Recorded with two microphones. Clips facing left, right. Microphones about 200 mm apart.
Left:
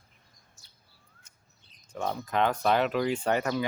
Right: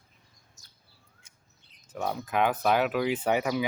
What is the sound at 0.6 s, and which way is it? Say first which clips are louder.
Chirp: right 1 dB; 40° right (ahead or behind).